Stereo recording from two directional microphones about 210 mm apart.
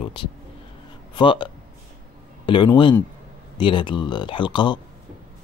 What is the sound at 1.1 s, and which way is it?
Speech, 25° left (ahead or behind).